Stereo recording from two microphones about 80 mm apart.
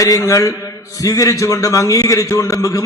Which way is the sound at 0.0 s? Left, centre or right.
Left.